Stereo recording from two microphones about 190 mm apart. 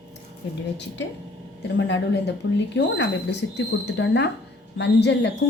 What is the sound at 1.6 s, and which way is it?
Speech, 65° left (ahead or behind).